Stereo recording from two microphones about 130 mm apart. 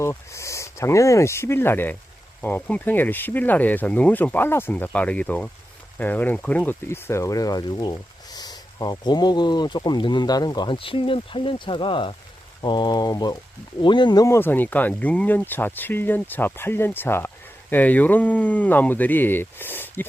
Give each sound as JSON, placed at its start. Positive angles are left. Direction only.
{"t": 0.0, "sound": "speech", "side_deg": 20}
{"t": 14.3, "sound": "speech", "side_deg": 15}